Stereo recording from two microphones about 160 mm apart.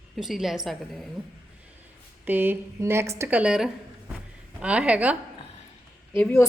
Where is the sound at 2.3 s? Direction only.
10° right (ahead or behind).